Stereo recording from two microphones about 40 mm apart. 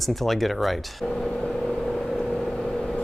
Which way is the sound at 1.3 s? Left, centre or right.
Centre.